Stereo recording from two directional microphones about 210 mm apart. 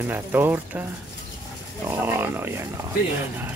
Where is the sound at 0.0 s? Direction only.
10° right (ahead or behind).